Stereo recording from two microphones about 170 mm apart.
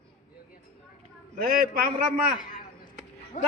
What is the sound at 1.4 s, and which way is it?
Speech, 60° right (ahead or behind).